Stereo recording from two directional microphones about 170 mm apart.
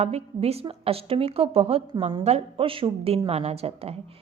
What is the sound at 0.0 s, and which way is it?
A woman's voice, 35° right (ahead or behind).